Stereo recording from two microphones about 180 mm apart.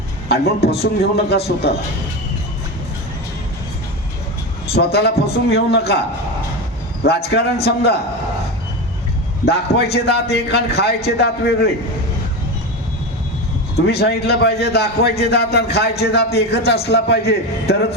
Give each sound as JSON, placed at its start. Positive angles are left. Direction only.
{"t": 0.3, "sound": "a man's voice", "side_deg": 60}
{"t": 4.7, "sound": "a man's voice", "side_deg": 60}
{"t": 7.0, "sound": "a man's voice", "side_deg": 65}
{"t": 9.5, "sound": "a man's voice", "side_deg": 65}
{"t": 13.8, "sound": "a man's voice", "side_deg": 65}